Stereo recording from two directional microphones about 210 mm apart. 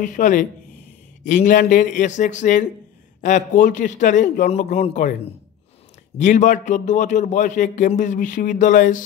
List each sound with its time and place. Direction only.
0.0 s speech: 40° left (ahead or behind)
6.1 s speech: 35° left (ahead or behind)